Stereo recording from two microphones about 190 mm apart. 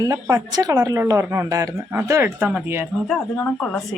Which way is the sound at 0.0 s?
20° right (ahead or behind).